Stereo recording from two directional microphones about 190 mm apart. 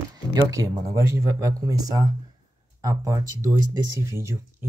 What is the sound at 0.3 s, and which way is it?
Speech, 15° right (ahead or behind).